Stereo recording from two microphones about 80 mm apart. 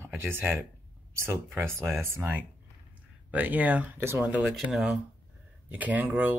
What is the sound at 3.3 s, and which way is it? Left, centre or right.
Speech, centre.